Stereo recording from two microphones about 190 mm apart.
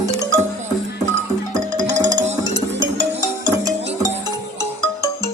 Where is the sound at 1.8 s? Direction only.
20° right (ahead or behind).